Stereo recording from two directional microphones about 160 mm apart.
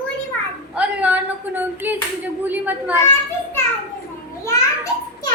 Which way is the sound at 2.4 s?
10° right (ahead or behind).